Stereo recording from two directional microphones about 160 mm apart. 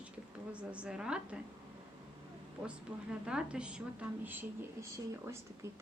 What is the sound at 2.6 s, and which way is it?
A woman's voice, 5° right (ahead or behind).